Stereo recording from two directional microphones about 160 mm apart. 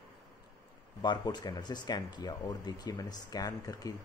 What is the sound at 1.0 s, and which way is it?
Speech, 25° left (ahead or behind).